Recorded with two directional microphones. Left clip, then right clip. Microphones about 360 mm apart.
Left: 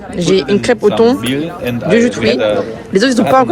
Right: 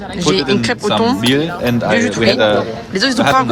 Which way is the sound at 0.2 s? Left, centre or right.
Centre.